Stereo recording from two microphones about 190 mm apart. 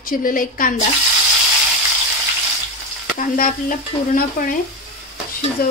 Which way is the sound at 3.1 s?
45° left (ahead or behind).